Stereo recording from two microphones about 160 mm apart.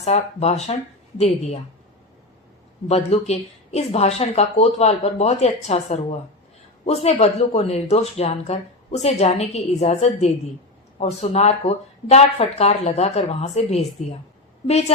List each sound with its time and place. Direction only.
0.0 s speech: 40° left (ahead or behind)
2.8 s speech: 40° left (ahead or behind)